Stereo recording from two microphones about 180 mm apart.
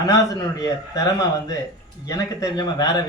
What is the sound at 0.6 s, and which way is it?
A man's voice, 20° left (ahead or behind).